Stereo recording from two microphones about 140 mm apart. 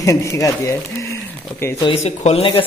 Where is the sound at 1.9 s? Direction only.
45° left (ahead or behind).